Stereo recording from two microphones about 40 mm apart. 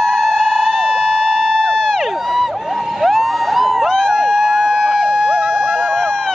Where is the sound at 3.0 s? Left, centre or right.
Centre.